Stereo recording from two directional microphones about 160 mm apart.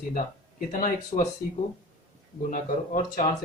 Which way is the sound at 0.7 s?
55° left (ahead or behind).